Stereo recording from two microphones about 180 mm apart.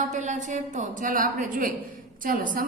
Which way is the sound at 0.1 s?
40° right (ahead or behind).